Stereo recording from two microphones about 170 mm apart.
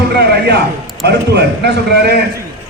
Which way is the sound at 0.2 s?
75° right (ahead or behind).